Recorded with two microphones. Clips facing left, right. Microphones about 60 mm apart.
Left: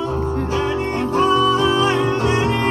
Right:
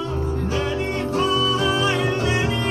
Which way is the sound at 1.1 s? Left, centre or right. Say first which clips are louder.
Left 6 dB; left.